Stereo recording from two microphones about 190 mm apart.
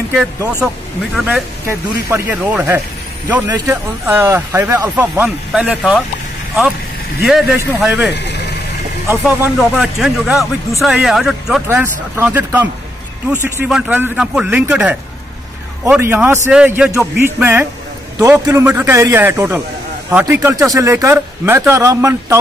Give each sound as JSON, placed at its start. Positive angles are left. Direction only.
{"t": 1.1, "sound": "speech", "side_deg": -5}
{"t": 7.2, "sound": "speech", "side_deg": -5}